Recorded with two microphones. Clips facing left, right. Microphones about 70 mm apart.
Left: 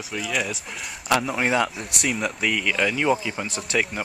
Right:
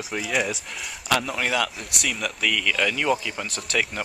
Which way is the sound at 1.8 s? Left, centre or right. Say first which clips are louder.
Left 3 dB; centre.